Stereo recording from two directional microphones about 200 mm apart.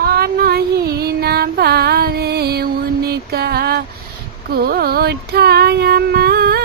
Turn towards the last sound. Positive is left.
turn(degrees=-50)  # may be behind; listen again after turning